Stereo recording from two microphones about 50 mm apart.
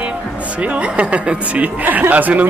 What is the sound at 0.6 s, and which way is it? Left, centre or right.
Speech, right.